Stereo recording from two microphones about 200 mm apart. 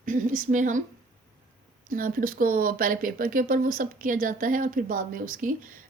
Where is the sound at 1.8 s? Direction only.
45° right (ahead or behind).